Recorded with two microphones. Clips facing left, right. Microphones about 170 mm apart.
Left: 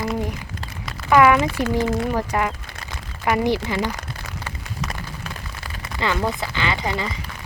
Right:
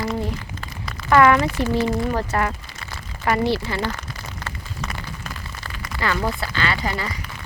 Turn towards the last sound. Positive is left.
turn(degrees=20)  # may be behind; listen again after turning